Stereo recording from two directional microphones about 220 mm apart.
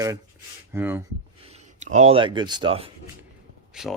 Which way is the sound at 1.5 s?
30° right (ahead or behind).